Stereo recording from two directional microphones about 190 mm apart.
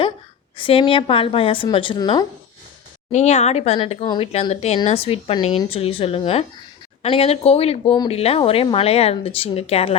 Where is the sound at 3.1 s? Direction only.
35° left (ahead or behind).